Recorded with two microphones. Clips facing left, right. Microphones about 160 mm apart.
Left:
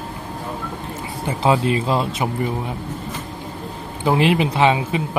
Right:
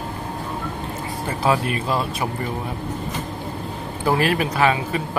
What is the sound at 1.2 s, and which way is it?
Speech, 20° left (ahead or behind).